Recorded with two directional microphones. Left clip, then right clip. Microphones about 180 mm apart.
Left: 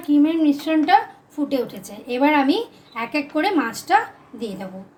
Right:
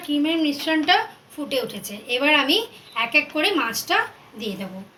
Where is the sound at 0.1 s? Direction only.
65° left (ahead or behind).